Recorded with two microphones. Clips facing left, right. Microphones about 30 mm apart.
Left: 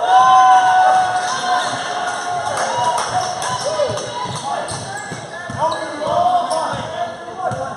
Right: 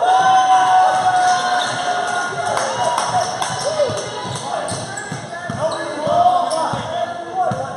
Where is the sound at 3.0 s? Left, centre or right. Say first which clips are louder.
Right 1 dB; centre.